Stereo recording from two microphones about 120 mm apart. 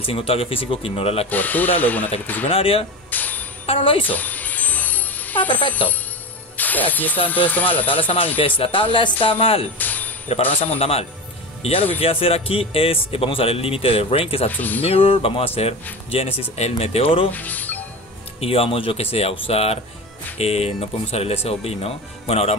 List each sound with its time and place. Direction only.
0.0 s speech: 50° left (ahead or behind)
1.3 s speech: 15° left (ahead or behind)
2.5 s speech: 50° left (ahead or behind)
3.1 s a sound: 15° left (ahead or behind)
3.6 s speech: 50° left (ahead or behind)
4.1 s music: 15° left (ahead or behind)
6.5 s speech: 15° left (ahead or behind)
8.4 s speech: 50° left (ahead or behind)
9.8 s a sound: 15° left (ahead or behind)
10.5 s speech: 55° left (ahead or behind)
17.3 s speech: 15° left (ahead or behind)
18.4 s speech: 55° left (ahead or behind)